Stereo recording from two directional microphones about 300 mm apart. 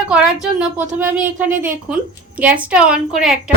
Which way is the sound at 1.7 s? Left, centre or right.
Centre.